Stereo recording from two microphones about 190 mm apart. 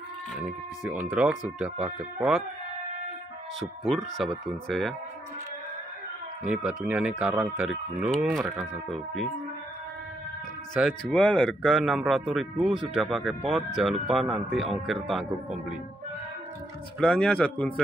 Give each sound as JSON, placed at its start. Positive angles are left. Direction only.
{"t": 0.4, "sound": "speech", "side_deg": -5}
{"t": 3.8, "sound": "speech", "side_deg": 0}
{"t": 6.4, "sound": "speech", "side_deg": -5}
{"t": 10.7, "sound": "speech", "side_deg": 0}
{"t": 17.0, "sound": "speech", "side_deg": 5}